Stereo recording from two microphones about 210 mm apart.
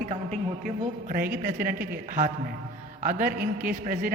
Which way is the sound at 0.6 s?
40° right (ahead or behind).